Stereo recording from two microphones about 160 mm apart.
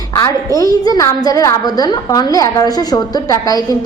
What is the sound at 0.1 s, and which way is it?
A child's voice, 20° left (ahead or behind).